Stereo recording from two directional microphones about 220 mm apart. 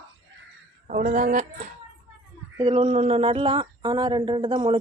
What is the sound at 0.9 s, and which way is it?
Speech, 35° right (ahead or behind).